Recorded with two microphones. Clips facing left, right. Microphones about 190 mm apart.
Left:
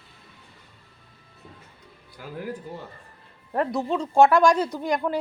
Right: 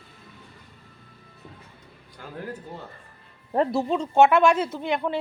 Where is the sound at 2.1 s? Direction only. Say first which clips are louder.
Left 2 dB; 10° left (ahead or behind).